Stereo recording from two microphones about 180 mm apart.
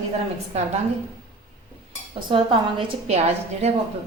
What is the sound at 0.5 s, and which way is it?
Speech, 35° right (ahead or behind).